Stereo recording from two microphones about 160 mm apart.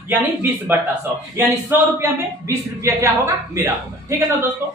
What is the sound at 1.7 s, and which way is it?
Speech, 15° right (ahead or behind).